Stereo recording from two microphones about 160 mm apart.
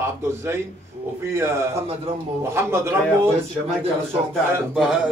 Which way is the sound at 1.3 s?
15° right (ahead or behind).